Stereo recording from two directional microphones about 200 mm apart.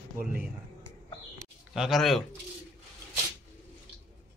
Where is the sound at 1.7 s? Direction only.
Centre (ahead or behind).